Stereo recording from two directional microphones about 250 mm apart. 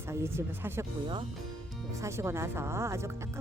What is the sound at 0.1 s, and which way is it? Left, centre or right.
Speech, centre.